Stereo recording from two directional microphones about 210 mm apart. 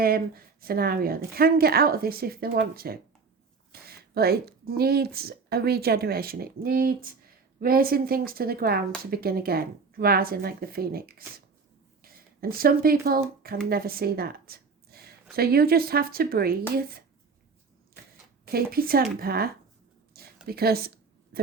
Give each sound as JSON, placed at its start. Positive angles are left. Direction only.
{"t": 0.0, "sound": "a woman's voice", "side_deg": -45}
{"t": 18.5, "sound": "a woman's voice", "side_deg": -45}
{"t": 20.1, "sound": "a sound", "side_deg": -45}
{"t": 20.5, "sound": "a woman's voice", "side_deg": -45}